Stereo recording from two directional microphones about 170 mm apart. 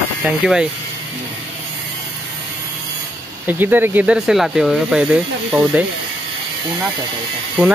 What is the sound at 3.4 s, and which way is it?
Speech, 10° right (ahead or behind).